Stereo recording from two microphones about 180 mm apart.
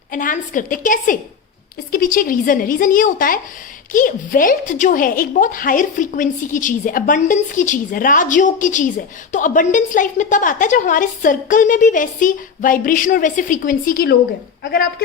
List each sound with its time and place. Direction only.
0.1 s a woman's voice: 50° left (ahead or behind)